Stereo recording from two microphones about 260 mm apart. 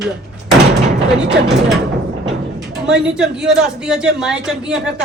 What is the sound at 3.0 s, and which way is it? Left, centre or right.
Speech, centre.